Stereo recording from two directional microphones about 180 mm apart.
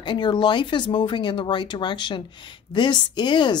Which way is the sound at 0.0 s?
25° left (ahead or behind).